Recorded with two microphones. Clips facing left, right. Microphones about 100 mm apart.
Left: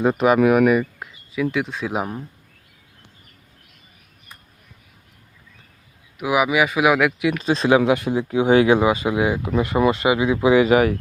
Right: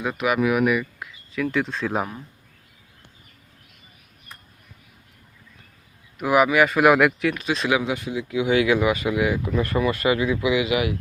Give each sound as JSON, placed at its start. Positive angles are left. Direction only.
{"t": 0.0, "sound": "speech", "side_deg": 35}
{"t": 1.3, "sound": "speech", "side_deg": 10}
{"t": 6.1, "sound": "speech", "side_deg": 5}
{"t": 7.3, "sound": "speech", "side_deg": 35}
{"t": 7.8, "sound": "speech", "side_deg": 60}
{"t": 8.1, "sound": "speech", "side_deg": 40}